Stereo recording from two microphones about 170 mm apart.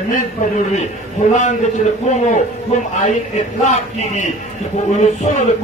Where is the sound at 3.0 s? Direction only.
40° left (ahead or behind).